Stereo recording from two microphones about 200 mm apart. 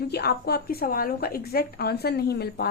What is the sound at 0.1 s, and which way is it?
A woman's voice, 55° left (ahead or behind).